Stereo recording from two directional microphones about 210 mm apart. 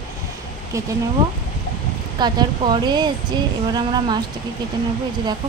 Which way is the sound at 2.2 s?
20° right (ahead or behind).